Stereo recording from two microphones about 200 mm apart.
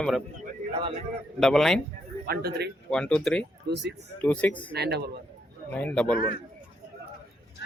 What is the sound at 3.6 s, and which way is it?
Speech, 55° right (ahead or behind).